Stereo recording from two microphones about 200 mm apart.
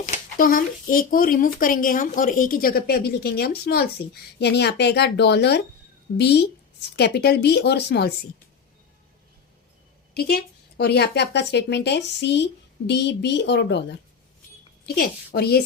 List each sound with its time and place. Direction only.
0.0 s speech: 45° left (ahead or behind)
10.2 s speech: 50° left (ahead or behind)
14.9 s speech: 50° left (ahead or behind)